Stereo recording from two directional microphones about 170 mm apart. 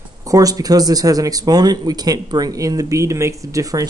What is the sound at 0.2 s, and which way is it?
Speech, 20° right (ahead or behind).